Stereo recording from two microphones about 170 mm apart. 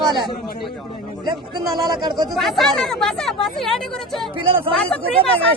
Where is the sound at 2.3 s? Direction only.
Centre (ahead or behind).